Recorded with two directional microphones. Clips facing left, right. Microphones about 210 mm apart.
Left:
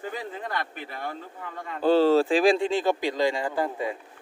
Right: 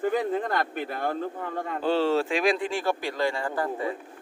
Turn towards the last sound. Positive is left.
turn(degrees=15)  # may be behind; listen again after turning